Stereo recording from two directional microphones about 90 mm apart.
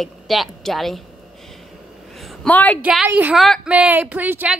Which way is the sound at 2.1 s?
Centre (ahead or behind).